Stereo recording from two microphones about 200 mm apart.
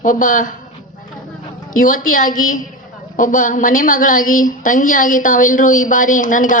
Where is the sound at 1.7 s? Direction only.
45° left (ahead or behind).